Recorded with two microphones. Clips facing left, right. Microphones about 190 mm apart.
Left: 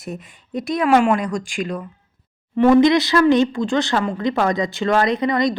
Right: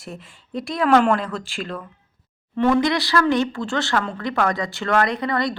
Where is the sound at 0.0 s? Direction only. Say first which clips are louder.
Left 5 dB; 20° left (ahead or behind).